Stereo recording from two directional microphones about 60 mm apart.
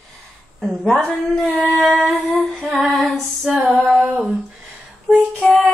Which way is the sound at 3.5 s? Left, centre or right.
Right.